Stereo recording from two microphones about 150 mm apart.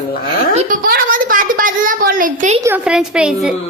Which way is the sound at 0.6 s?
70° right (ahead or behind).